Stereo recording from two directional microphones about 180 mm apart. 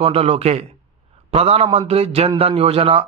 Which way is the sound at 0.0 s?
35° right (ahead or behind).